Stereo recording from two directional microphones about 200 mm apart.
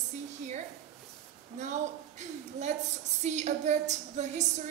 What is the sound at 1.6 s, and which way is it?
A woman's voice, 35° right (ahead or behind).